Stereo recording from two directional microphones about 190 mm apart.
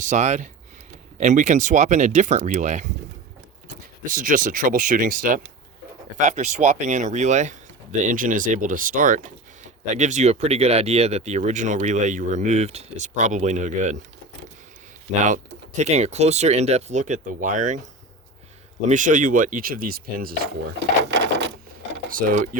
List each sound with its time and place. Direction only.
0.0 s speech: 40° right (ahead or behind)
4.0 s speech: 45° right (ahead or behind)
15.2 s speech: 40° right (ahead or behind)
18.9 s speech: 45° right (ahead or behind)
21.0 s sewing machine: 65° right (ahead or behind)
22.1 s speech: 45° right (ahead or behind)